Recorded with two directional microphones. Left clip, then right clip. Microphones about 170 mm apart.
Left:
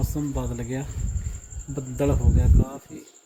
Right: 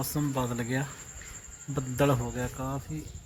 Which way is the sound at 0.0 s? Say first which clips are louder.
Left 1 dB; centre (ahead or behind).